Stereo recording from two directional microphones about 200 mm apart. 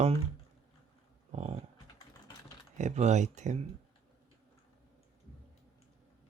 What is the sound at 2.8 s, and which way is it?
Speech, 35° right (ahead or behind).